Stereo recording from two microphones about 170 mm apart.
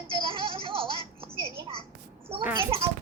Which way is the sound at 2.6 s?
35° right (ahead or behind).